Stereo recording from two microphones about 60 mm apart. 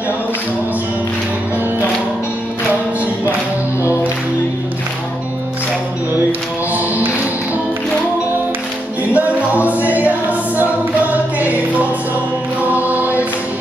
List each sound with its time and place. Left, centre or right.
9.1 s music: right
12.7 s choir: right